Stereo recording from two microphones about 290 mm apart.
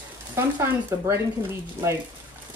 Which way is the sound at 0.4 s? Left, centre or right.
Centre.